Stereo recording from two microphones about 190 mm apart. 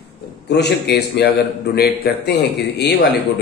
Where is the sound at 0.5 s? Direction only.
60° left (ahead or behind).